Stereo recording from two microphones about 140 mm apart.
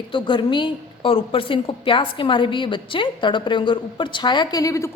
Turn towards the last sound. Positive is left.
turn(degrees=25)  # may be behind; listen again after turning